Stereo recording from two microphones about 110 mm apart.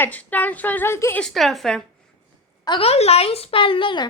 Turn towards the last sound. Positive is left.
turn(degrees=50)  # may be behind; listen again after turning